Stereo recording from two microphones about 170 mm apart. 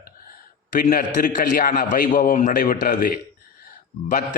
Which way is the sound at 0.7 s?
55° left (ahead or behind).